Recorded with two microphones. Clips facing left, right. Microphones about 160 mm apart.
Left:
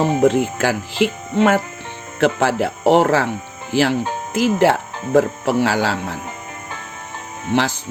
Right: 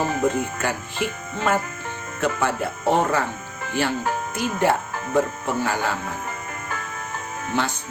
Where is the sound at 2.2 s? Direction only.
90° left.